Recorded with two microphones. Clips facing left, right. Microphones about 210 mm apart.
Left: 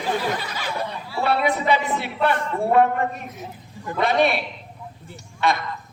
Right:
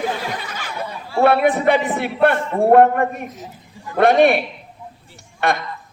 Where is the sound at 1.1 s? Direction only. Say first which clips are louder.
Right 7 dB; 55° right (ahead or behind).